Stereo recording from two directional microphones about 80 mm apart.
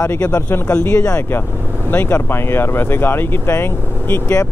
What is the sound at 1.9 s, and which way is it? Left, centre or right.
Speech, left.